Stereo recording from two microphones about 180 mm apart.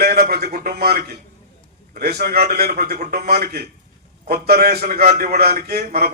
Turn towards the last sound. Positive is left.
turn(degrees=-60)  # may be behind; listen again after turning